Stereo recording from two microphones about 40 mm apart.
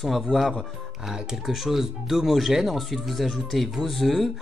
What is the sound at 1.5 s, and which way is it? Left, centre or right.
Speech, centre.